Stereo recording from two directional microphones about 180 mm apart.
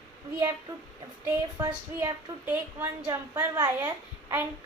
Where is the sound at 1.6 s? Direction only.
15° right (ahead or behind).